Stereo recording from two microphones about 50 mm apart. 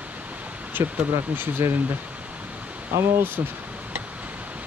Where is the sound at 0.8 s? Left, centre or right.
Right.